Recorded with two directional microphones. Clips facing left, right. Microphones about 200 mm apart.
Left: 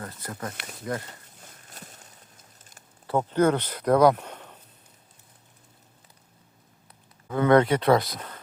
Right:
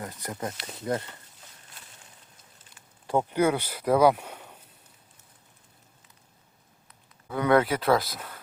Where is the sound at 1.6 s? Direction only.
45° left (ahead or behind).